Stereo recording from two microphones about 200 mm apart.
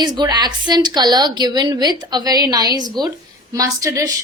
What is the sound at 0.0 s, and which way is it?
A woman's voice, 20° right (ahead or behind).